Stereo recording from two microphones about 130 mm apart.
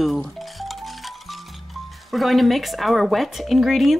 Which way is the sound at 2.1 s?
Centre (ahead or behind).